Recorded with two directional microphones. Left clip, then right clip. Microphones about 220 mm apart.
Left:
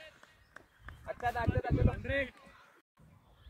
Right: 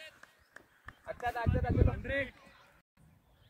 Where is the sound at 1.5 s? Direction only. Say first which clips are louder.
Even; centre (ahead or behind).